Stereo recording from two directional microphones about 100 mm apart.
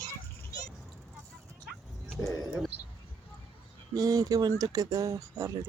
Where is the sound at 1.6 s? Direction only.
Centre (ahead or behind).